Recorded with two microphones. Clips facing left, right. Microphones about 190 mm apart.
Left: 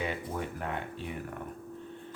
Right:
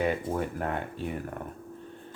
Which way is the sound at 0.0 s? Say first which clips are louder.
Right 6 dB; 50° right (ahead or behind).